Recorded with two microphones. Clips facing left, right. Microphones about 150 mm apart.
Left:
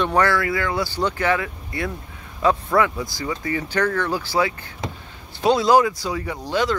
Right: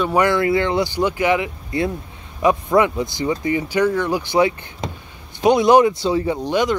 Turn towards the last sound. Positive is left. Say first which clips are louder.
# right 4 dB
turn(degrees=-15)  # may be behind; listen again after turning